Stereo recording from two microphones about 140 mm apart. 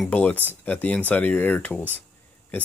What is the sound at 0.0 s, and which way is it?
Speech, 10° left (ahead or behind).